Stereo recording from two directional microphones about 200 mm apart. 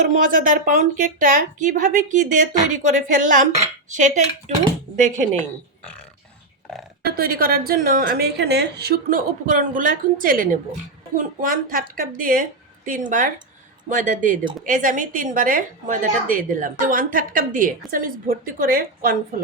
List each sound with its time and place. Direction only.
0.1 s a woman's voice: 45° right (ahead or behind)
7.0 s a woman's voice: 50° right (ahead or behind)